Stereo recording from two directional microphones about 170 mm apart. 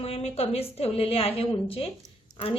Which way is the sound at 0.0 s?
35° left (ahead or behind).